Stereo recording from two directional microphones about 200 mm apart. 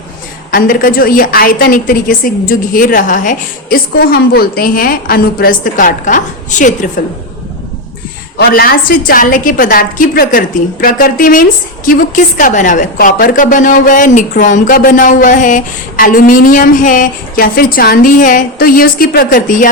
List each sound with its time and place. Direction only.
0.5 s a woman's voice: 45° left (ahead or behind)
8.4 s a woman's voice: 50° left (ahead or behind)